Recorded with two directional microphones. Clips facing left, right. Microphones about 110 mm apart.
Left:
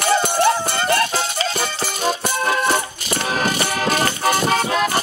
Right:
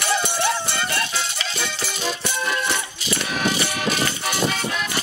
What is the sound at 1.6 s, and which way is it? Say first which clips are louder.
Music: left 5 dB; 45° left (ahead or behind).